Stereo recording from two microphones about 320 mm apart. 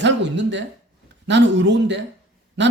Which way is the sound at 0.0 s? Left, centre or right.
Right.